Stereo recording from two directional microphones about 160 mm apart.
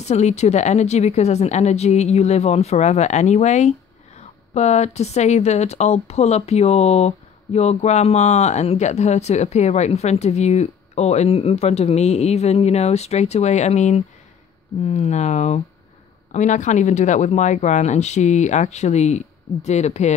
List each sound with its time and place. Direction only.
0.0 s speech: 45° left (ahead or behind)